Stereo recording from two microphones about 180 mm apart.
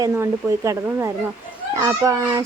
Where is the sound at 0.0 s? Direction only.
15° right (ahead or behind).